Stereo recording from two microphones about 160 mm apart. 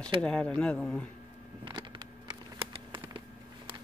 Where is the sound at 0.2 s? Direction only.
5° left (ahead or behind).